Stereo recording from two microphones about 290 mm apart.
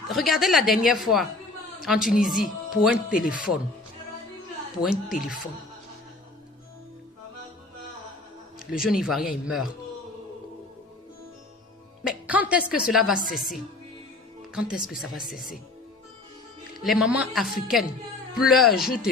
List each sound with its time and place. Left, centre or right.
0.1 s a woman's voice: centre
4.8 s a woman's voice: centre
5.1 s speech: left
8.5 s a woman's voice: centre
12.0 s speech: centre
14.5 s a woman's voice: centre
16.8 s a woman's voice: centre